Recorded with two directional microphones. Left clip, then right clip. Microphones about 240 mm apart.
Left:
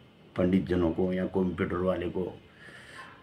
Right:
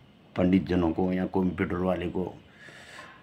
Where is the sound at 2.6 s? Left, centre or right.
Right.